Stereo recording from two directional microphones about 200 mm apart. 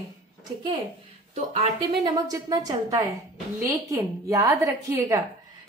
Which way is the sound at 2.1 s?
20° right (ahead or behind).